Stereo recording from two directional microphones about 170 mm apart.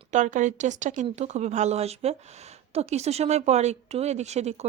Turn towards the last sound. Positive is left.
turn(degrees=-40)  # may be behind; listen again after turning